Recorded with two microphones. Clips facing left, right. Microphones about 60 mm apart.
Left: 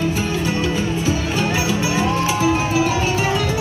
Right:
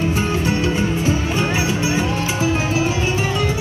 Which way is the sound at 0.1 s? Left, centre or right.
Right.